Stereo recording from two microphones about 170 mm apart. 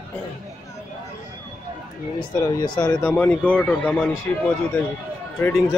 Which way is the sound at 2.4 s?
25° left (ahead or behind).